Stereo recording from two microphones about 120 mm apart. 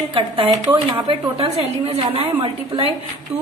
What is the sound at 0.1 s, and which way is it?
A woman's voice, 45° right (ahead or behind).